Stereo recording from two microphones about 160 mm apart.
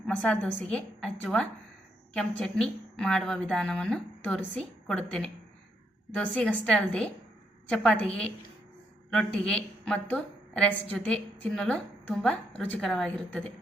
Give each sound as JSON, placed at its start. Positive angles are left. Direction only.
{"t": 0.1, "sound": "a woman's voice", "side_deg": 10}